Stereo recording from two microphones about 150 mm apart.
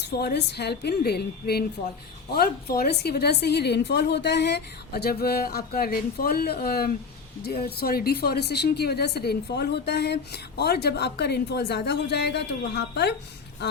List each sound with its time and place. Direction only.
0.0 s speech: 90° left